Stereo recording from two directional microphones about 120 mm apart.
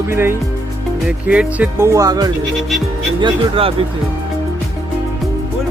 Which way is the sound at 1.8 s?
25° right (ahead or behind).